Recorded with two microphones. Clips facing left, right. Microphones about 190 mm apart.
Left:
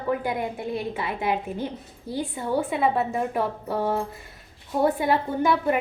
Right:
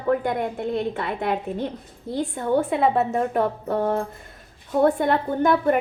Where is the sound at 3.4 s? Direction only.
60° right (ahead or behind).